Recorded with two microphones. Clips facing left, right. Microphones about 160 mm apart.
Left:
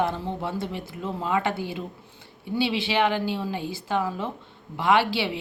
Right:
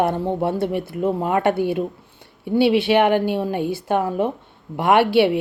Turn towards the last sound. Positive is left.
turn(degrees=-60)  # may be behind; listen again after turning